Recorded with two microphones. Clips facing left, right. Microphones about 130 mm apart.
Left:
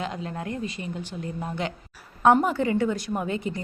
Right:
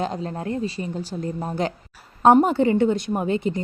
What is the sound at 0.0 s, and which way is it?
Speech, 35° right (ahead or behind).